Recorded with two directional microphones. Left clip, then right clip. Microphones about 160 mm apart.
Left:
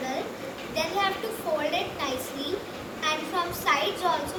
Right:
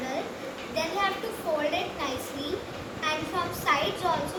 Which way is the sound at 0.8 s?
Centre (ahead or behind).